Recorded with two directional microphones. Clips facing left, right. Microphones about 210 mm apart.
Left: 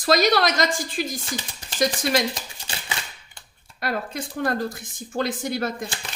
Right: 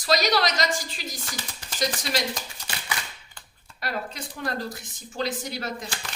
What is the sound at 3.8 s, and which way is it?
Speech, 50° left (ahead or behind).